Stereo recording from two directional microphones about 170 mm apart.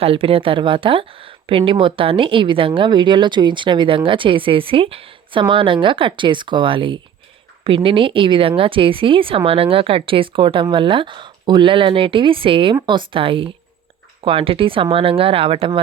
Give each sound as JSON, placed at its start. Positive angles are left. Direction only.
{"t": 0.0, "sound": "speech", "side_deg": -35}